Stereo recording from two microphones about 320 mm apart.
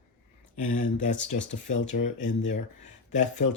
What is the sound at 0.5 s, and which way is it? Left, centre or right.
Speech, left.